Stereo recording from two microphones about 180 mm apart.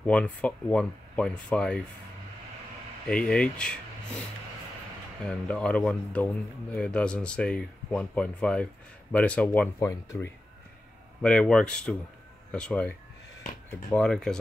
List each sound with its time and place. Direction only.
0.0 s speech: 5° left (ahead or behind)
3.1 s speech: 5° left (ahead or behind)
5.2 s speech: 5° left (ahead or behind)